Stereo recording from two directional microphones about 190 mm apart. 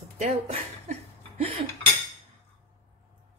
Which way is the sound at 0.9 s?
35° right (ahead or behind).